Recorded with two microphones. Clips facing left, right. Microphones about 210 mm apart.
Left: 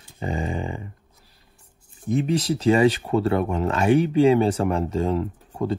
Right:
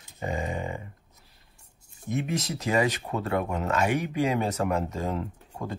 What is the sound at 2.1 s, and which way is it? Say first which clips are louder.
Speech: left 7 dB; 30° left (ahead or behind).